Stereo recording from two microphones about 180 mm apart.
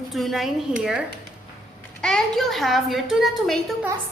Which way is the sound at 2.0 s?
5° left (ahead or behind).